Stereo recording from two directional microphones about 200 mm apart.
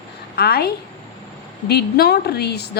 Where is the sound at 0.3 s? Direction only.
50° left (ahead or behind).